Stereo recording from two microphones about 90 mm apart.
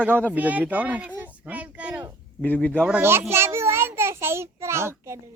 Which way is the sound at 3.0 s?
25° right (ahead or behind).